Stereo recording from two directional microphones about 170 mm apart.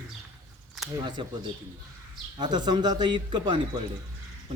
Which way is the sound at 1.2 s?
30° right (ahead or behind).